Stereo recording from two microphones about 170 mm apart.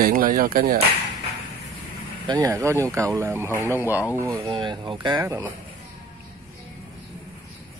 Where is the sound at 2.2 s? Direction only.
25° right (ahead or behind).